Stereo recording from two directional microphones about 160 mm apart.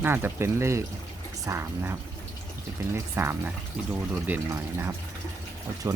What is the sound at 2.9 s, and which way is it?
Speech, 15° right (ahead or behind).